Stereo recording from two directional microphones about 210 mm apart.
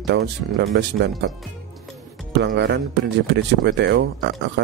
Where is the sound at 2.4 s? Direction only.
55° right (ahead or behind).